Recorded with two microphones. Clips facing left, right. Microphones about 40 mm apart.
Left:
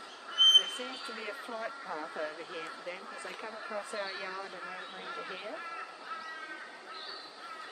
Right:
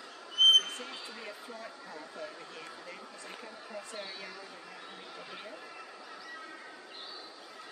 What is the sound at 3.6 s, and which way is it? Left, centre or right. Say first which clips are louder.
Speech: left 5 dB; left.